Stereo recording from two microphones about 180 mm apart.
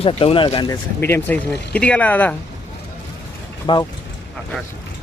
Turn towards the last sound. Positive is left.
turn(degrees=25)  # may be behind; listen again after turning